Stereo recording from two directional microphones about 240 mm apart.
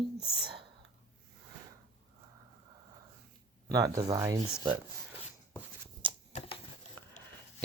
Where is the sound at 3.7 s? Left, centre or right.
Centre.